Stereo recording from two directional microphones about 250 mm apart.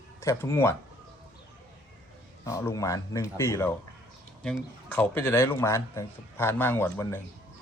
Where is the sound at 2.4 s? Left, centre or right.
Centre.